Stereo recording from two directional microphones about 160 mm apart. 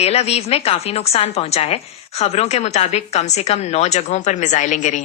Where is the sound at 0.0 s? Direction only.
40° left (ahead or behind).